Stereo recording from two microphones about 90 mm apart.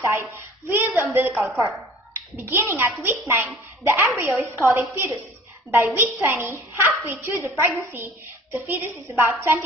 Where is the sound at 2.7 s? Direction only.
25° right (ahead or behind).